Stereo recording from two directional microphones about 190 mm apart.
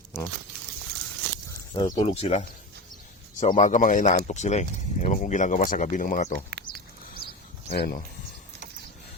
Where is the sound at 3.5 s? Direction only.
35° left (ahead or behind).